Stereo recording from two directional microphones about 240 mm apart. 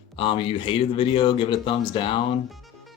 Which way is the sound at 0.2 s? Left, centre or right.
Left.